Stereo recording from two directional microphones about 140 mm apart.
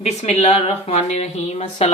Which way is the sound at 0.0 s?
50° left (ahead or behind).